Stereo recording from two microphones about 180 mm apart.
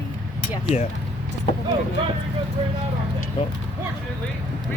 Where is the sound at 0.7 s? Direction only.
35° left (ahead or behind).